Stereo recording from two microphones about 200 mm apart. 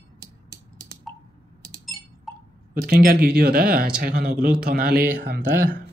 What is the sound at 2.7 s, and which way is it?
Speech, 45° right (ahead or behind).